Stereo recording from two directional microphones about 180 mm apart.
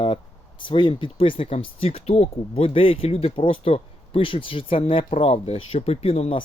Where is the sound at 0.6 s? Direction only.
25° left (ahead or behind).